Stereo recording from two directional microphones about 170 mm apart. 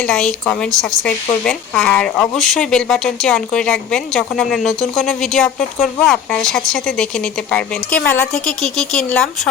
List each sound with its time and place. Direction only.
0.1 s speech: 5° left (ahead or behind)